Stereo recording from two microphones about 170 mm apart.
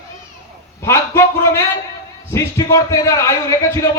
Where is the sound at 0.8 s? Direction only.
15° left (ahead or behind).